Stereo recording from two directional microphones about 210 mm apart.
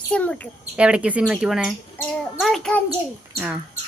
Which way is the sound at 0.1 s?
5° left (ahead or behind).